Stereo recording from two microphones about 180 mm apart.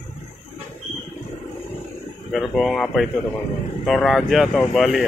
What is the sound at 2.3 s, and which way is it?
Speech, centre (ahead or behind).